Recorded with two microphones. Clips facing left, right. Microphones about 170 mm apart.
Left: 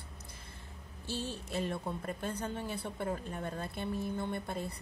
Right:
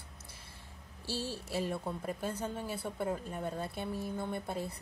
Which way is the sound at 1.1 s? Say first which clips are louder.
Right 1 dB; 10° right (ahead or behind).